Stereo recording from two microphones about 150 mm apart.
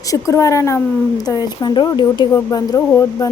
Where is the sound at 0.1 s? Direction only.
20° left (ahead or behind).